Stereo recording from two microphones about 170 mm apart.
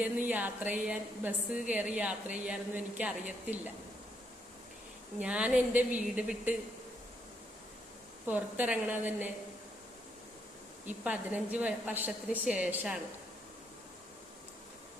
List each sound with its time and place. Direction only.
0.0 s a woman's voice: 10° right (ahead or behind)
5.2 s a woman's voice: 5° right (ahead or behind)
8.3 s a woman's voice: 10° right (ahead or behind)
11.0 s a woman's voice: 10° right (ahead or behind)